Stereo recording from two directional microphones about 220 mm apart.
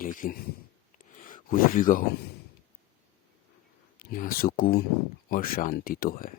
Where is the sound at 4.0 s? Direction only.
40° left (ahead or behind).